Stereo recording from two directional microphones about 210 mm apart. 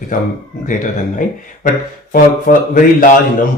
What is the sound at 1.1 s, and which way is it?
Speech, 40° left (ahead or behind).